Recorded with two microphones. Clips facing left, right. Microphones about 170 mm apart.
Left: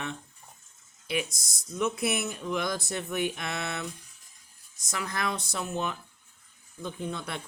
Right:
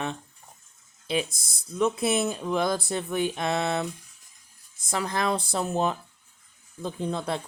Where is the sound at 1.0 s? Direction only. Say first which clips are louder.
Right 4 dB; 25° right (ahead or behind).